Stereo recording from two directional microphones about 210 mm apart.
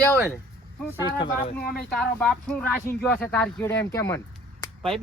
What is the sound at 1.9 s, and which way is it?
Speech, 5° left (ahead or behind).